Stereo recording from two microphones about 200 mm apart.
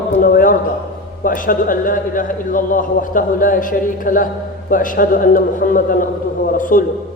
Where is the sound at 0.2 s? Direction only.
45° left (ahead or behind).